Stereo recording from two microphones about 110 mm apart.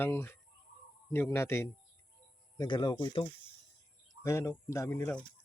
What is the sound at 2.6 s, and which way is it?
Speech, 40° left (ahead or behind).